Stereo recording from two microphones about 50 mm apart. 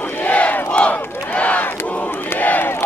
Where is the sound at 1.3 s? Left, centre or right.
Left.